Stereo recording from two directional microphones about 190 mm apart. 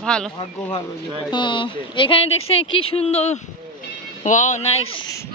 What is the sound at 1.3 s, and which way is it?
Speech, 25° left (ahead or behind).